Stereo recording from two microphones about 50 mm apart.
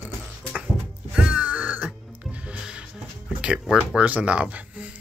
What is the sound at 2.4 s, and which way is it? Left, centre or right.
Music, centre.